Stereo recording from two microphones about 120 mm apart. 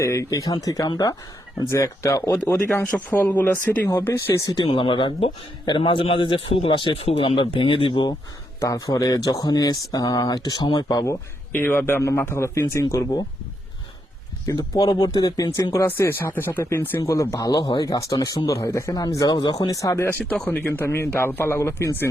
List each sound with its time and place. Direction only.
0.0 s speech: 25° left (ahead or behind)
4.6 s a man's voice: 45° left (ahead or behind)
8.6 s speech: 30° left (ahead or behind)
11.5 s speech: 15° left (ahead or behind)
14.4 s speech: 30° left (ahead or behind)
15.9 s speech: 20° left (ahead or behind)
20.1 s speech: 10° left (ahead or behind)